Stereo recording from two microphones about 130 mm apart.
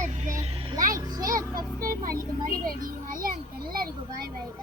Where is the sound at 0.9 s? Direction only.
25° right (ahead or behind).